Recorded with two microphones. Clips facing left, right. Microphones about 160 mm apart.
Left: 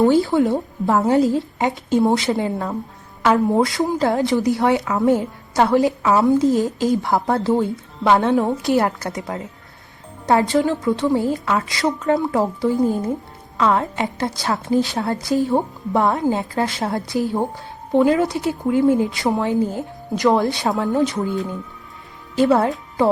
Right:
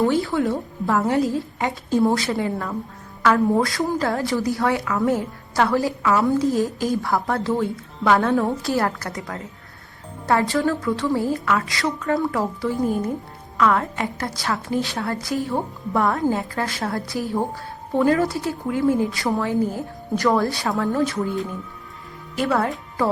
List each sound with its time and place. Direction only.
0.0 s a woman's voice: 35° left (ahead or behind)
0.3 s a woman's voice: 20° left (ahead or behind)
22.4 s a woman's voice: 20° left (ahead or behind)